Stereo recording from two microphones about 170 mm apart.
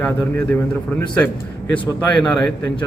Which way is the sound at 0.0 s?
10° left (ahead or behind).